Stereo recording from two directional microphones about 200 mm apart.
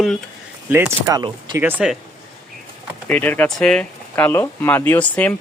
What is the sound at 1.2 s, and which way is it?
Speech, 20° right (ahead or behind).